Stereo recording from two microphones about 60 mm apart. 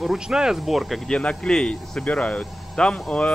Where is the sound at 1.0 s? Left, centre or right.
Centre.